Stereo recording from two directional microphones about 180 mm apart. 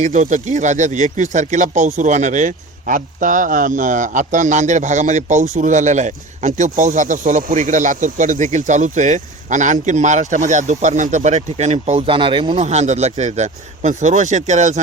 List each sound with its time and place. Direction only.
0.0 s speech: 40° right (ahead or behind)
12.5 s speech: 40° right (ahead or behind)